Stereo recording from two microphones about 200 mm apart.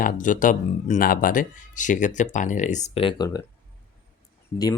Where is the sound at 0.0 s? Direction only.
40° left (ahead or behind); by 3.4 s 20° left (ahead or behind).